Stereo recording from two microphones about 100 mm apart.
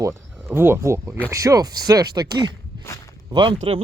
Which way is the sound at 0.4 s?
25° right (ahead or behind).